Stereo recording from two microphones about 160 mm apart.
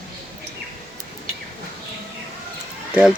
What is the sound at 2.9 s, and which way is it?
Speech, 5° right (ahead or behind).